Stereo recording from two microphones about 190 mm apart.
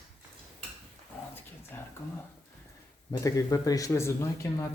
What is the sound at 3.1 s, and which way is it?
Speech, 20° left (ahead or behind).